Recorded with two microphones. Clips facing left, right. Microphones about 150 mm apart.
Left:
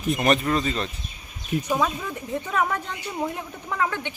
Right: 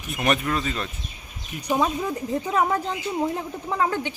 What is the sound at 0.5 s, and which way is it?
Speech, 15° left (ahead or behind).